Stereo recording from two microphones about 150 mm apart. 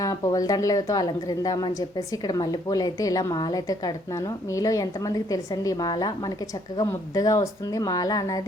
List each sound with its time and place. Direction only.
0.0 s a woman's voice: 25° left (ahead or behind)